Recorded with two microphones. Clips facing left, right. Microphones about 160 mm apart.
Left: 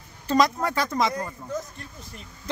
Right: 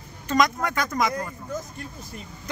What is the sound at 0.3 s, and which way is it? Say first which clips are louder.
Speech: left 1 dB; 30° left (ahead or behind).